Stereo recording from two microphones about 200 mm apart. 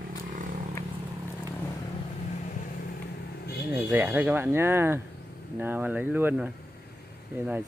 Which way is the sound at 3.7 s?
10° right (ahead or behind).